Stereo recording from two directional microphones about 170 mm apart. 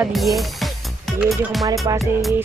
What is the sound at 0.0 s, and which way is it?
Speech, centre (ahead or behind).